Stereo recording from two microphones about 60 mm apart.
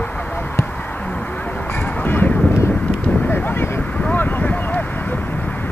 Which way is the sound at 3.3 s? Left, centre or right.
Left.